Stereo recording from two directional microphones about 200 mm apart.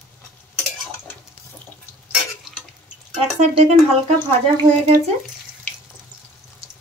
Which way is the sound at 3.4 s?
35° right (ahead or behind).